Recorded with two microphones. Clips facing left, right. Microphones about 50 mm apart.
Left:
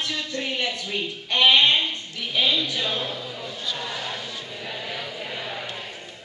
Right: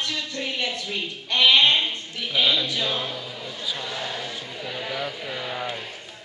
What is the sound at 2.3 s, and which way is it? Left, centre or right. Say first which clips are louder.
Speech: right 1 dB; right.